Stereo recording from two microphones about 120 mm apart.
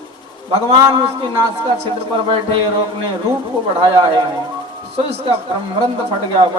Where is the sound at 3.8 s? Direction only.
40° right (ahead or behind).